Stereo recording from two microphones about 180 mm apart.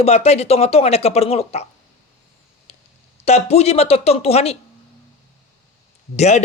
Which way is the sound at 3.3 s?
35° left (ahead or behind).